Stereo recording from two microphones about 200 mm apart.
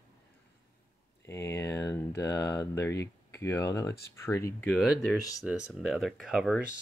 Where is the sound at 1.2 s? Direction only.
10° left (ahead or behind).